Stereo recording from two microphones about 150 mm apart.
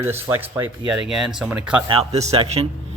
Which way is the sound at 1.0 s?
5° right (ahead or behind).